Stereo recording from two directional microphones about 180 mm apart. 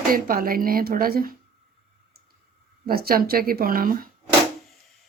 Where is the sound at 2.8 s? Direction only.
55° right (ahead or behind).